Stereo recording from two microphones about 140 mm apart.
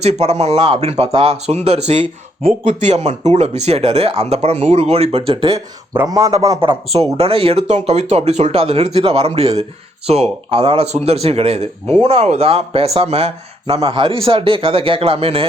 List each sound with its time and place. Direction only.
0.0 s speech: 50° right (ahead or behind)
5.9 s speech: 20° right (ahead or behind)
6.6 s speech: 40° right (ahead or behind)